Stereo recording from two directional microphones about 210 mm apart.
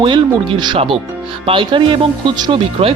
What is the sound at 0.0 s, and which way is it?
Speech, 20° right (ahead or behind).